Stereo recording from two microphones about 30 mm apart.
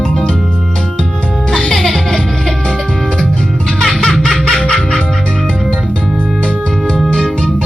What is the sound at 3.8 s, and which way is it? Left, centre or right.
Music, centre.